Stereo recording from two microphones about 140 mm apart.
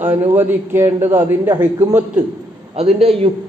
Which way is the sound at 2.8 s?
45° right (ahead or behind).